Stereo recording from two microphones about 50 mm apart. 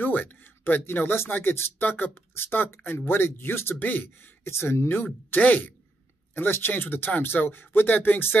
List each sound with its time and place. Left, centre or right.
0.0 s speech: left
2.3 s speech: left
3.8 s speech: left
4.5 s speech: left